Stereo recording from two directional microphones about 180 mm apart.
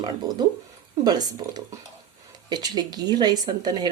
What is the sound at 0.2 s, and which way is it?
Speech, 20° right (ahead or behind).